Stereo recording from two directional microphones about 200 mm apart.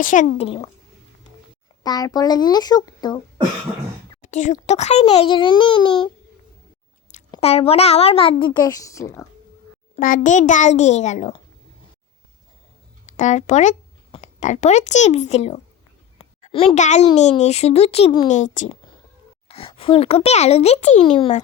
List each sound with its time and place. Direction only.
0.0 s a child's voice: 40° left (ahead or behind)
0.3 s a woman's voice: 30° left (ahead or behind)
1.8 s a woman's voice: 20° left (ahead or behind)
4.2 s a child's voice: 35° left (ahead or behind)
7.3 s a woman's voice: 30° left (ahead or behind)
9.9 s a child's voice: 40° left (ahead or behind)
13.1 s speech: 35° left (ahead or behind)
16.1 s a sound: 30° left (ahead or behind)
17.2 s a child's voice: 35° left (ahead or behind)
18.3 s a child's voice: 40° left (ahead or behind)